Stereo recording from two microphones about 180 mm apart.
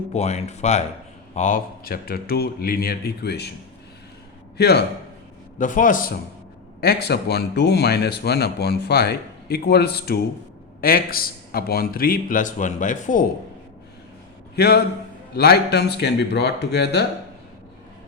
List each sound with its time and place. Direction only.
0.1 s speech: 35° left (ahead or behind); by 3.5 s 65° left (ahead or behind)
4.5 s a man's voice: 65° left (ahead or behind)
5.5 s a man's voice: 45° left (ahead or behind)
6.8 s speech: 65° left (ahead or behind); by 13.2 s 45° left (ahead or behind)
14.5 s speech: 65° left (ahead or behind)